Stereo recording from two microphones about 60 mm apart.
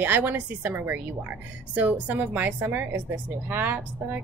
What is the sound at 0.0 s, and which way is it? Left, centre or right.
A woman's voice, right.